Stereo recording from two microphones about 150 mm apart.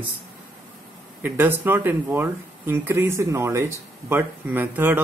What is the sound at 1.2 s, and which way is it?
Speech, 15° right (ahead or behind).